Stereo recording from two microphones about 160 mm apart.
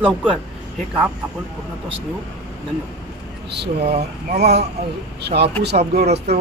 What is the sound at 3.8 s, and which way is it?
Speech, 40° right (ahead or behind).